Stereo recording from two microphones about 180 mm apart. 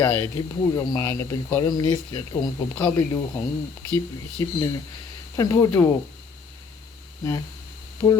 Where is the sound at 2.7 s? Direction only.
10° left (ahead or behind).